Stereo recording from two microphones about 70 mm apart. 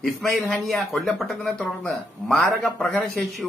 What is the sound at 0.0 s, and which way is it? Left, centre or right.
Speech, centre.